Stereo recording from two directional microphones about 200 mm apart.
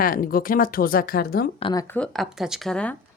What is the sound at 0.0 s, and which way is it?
A woman's voice, 45° left (ahead or behind).